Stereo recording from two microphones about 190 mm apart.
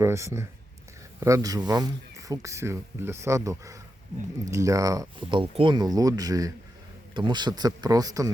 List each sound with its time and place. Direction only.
0.0 s speech: 15° right (ahead or behind)